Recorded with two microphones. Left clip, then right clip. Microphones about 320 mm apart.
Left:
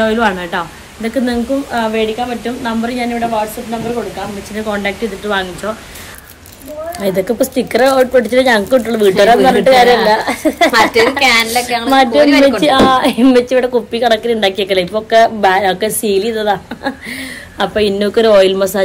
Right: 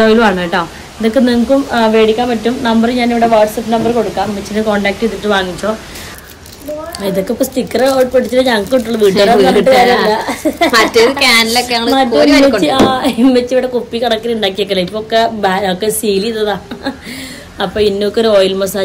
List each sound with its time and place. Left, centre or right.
0.0 s speech: centre
4.6 s speech: centre
7.0 s speech: left
10.7 s speech: centre
11.9 s speech: left
12.3 s speech: centre
12.6 s speech: left